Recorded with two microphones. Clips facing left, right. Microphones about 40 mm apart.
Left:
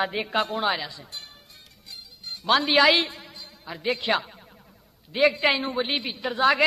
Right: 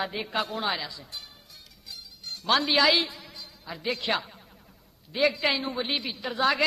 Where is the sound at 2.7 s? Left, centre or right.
Left.